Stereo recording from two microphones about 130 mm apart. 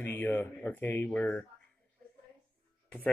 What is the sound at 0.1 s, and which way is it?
Speech, 15° left (ahead or behind).